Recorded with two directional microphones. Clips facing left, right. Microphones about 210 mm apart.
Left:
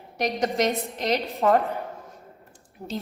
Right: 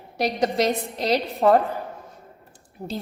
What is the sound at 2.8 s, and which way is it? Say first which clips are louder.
Speech: right 2 dB; 35° right (ahead or behind).